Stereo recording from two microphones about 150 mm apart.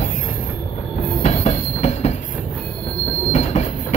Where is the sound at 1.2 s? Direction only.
45° left (ahead or behind).